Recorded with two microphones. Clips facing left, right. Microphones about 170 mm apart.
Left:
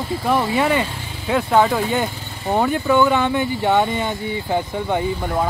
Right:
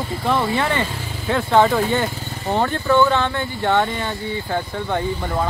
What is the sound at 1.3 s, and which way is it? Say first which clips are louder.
Speech: even; centre (ahead or behind).